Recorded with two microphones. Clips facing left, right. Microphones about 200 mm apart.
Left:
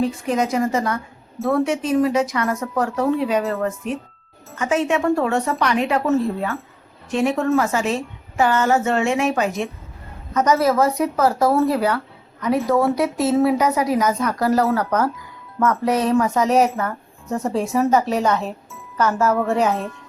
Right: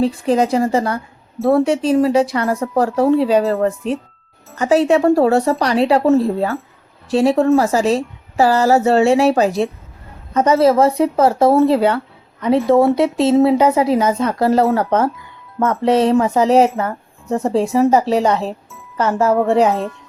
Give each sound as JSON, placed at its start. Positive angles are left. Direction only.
{"t": 0.0, "sound": "a woman's voice", "side_deg": -30}